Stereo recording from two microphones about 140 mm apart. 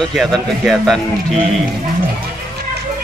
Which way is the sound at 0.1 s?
Centre (ahead or behind).